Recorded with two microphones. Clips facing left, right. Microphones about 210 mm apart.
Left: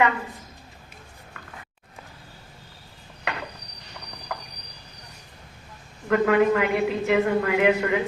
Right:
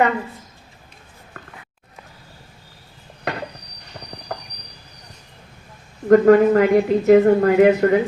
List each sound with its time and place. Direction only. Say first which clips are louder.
3.3 s a sound: right 5 dB; 40° right (ahead or behind)
4.3 s train: right 4 dB; 40° right (ahead or behind)
6.1 s speech: right 8 dB; 40° right (ahead or behind)